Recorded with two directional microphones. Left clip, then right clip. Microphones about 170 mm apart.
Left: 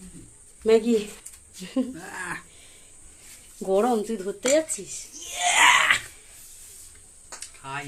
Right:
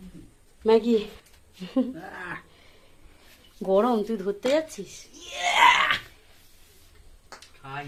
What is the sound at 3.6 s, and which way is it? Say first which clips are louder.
Speech: even; centre (ahead or behind).